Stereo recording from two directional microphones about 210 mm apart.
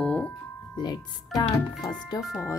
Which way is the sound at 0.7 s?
20° left (ahead or behind).